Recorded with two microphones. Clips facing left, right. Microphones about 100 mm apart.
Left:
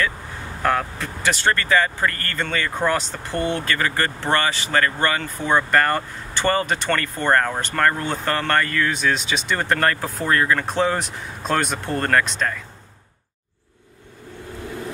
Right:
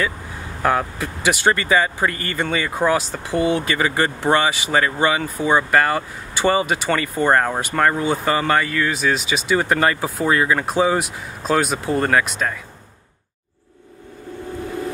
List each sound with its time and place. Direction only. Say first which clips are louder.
0.6 s speech: right 2 dB; 10° right (ahead or behind)